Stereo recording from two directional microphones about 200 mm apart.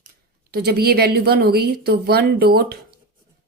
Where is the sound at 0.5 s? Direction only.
50° right (ahead or behind).